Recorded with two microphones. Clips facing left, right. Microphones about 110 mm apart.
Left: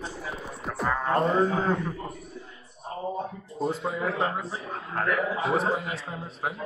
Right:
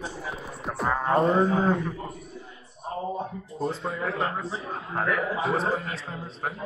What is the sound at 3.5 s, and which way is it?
A man's voice, centre (ahead or behind).